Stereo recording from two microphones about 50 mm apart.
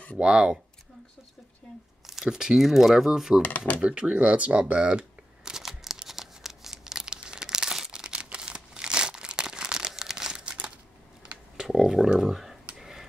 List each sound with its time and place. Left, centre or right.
0.2 s speech: centre
2.0 s speech: centre
3.4 s speech: left
4.0 s speech: centre
5.6 s crumpling: centre
11.2 s typing: centre
11.7 s a sound: centre